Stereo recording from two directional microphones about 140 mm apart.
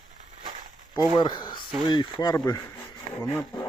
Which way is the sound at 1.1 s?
35° left (ahead or behind).